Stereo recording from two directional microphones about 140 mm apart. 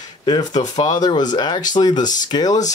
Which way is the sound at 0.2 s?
30° left (ahead or behind).